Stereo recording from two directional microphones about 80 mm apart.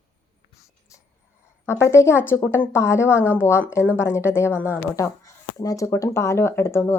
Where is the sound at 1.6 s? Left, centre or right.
Left.